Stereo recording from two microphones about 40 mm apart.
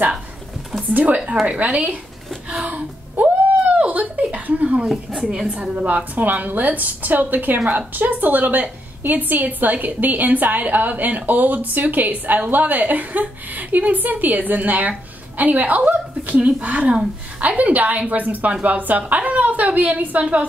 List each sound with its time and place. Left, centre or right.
0.9 s a woman's voice: right
3.2 s a sound: right
4.8 s a woman's voice: centre
5.5 s a woman's voice: right
6.1 s a woman's voice: right